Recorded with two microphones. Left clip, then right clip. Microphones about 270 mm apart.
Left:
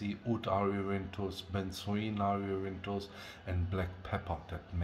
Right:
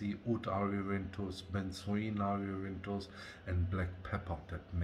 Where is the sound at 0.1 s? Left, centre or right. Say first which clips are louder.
Left 4 dB; centre.